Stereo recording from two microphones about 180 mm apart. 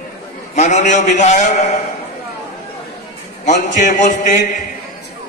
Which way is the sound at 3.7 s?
45° left (ahead or behind).